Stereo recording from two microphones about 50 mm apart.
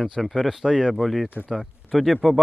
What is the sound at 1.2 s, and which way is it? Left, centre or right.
Speech, right.